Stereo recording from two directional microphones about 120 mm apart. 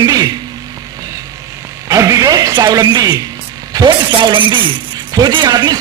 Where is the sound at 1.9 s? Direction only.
25° right (ahead or behind).